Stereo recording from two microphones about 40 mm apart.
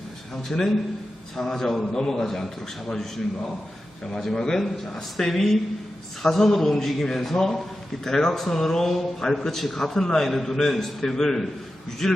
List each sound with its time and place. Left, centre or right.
0.4 s a man's voice: centre
4.1 s a man's voice: centre